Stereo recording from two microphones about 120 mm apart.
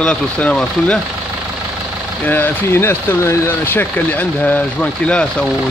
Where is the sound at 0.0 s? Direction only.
10° left (ahead or behind).